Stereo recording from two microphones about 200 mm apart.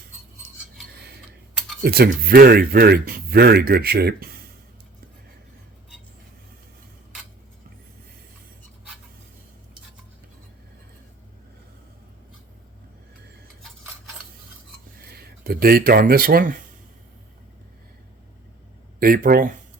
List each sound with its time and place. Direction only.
1.8 s speech: 50° right (ahead or behind)
15.2 s speech: 50° right (ahead or behind)
18.9 s speech: 45° right (ahead or behind)